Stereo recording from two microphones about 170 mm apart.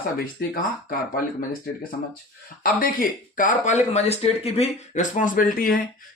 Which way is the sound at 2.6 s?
55° left (ahead or behind).